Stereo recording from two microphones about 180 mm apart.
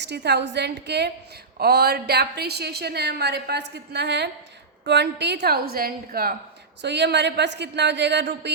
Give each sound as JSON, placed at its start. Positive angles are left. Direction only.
{"t": 0.0, "sound": "a woman's voice", "side_deg": -70}
{"t": 6.8, "sound": "a woman's voice", "side_deg": -70}